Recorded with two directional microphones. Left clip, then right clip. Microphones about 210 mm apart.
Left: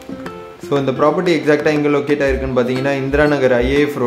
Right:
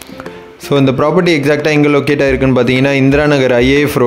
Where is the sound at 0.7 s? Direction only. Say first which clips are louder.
Right 3 dB; 40° right (ahead or behind).